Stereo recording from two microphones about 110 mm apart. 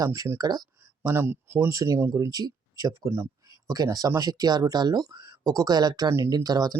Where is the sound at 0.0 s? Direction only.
30° right (ahead or behind).